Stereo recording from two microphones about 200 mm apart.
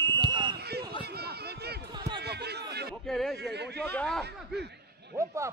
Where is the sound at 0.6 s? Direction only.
55° right (ahead or behind).